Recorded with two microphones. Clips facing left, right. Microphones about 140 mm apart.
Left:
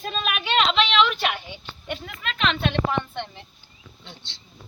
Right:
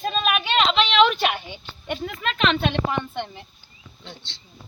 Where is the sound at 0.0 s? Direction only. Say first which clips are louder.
Right 5 dB; 25° right (ahead or behind).